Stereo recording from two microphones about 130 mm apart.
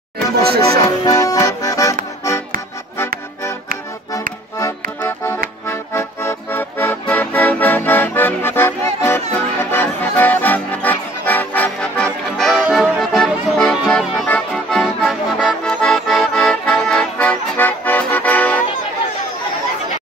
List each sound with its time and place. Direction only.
0.7 s accordion: 25° left (ahead or behind)
4.6 s accordion: 20° left (ahead or behind)
5.7 s music: 20° left (ahead or behind); by 13.0 s 10° right (ahead or behind)
13.0 s music: centre (ahead or behind)
14.5 s accordion: 5° left (ahead or behind)